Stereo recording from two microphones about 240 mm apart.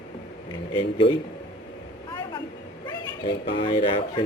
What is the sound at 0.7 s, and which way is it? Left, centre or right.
Speech, left.